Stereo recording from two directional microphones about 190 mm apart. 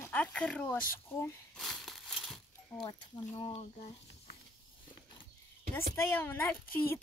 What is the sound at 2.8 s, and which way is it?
Speech, 25° left (ahead or behind).